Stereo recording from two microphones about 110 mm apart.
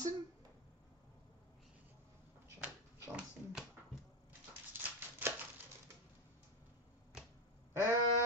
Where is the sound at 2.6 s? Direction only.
10° right (ahead or behind).